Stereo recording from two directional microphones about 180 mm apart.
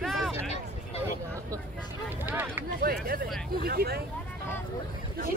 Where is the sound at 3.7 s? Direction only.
60° right (ahead or behind).